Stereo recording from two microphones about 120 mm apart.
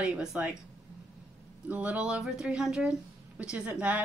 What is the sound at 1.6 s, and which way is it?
Speech, 10° right (ahead or behind).